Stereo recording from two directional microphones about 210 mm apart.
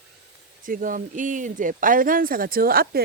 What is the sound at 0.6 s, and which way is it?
Speech, 40° right (ahead or behind).